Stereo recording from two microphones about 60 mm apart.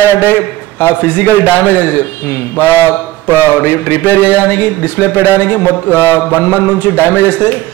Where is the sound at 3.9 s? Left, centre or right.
Left.